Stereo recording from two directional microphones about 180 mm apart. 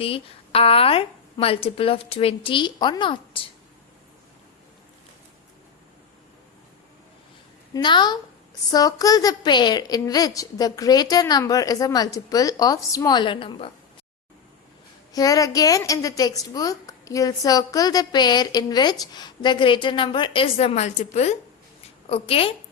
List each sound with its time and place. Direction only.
0.0 s a woman's voice: 30° left (ahead or behind)
7.7 s a woman's voice: 25° left (ahead or behind)
15.1 s a woman's voice: 20° left (ahead or behind)